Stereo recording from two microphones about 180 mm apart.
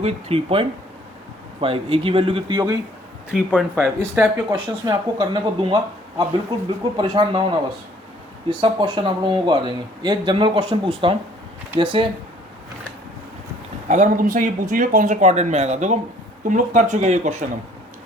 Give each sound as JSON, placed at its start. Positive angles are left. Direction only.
{"t": 0.0, "sound": "speech", "side_deg": -35}
{"t": 3.3, "sound": "speech", "side_deg": -10}
{"t": 4.5, "sound": "speech", "side_deg": -25}
{"t": 8.4, "sound": "speech", "side_deg": -25}
{"t": 13.8, "sound": "speech", "side_deg": -45}